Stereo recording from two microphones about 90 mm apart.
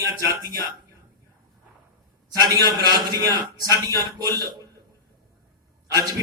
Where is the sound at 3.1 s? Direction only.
45° right (ahead or behind).